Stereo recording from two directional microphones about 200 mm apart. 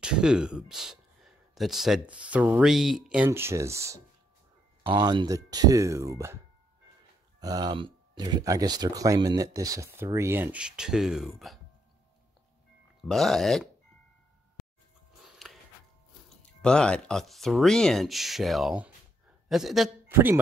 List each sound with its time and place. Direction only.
0.0 s speech: 5° right (ahead or behind)
13.1 s speech: centre (ahead or behind)
15.2 s a sound: centre (ahead or behind)
16.6 s a man's voice: 5° left (ahead or behind)